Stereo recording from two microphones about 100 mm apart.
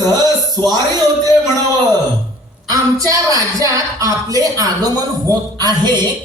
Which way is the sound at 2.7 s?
35° right (ahead or behind).